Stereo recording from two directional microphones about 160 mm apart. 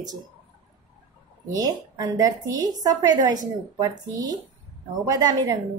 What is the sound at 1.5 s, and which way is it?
Speech, 25° right (ahead or behind).